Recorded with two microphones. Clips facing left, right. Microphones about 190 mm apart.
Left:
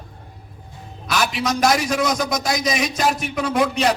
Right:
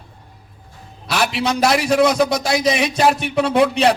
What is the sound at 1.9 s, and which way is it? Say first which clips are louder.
A man's voice: right 6 dB; 30° right (ahead or behind).